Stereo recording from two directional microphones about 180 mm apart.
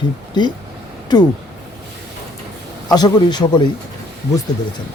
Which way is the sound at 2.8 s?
25° left (ahead or behind).